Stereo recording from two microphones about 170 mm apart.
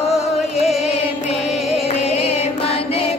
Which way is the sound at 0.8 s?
40° left (ahead or behind).